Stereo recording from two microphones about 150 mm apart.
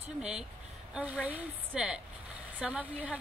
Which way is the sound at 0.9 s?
10° right (ahead or behind).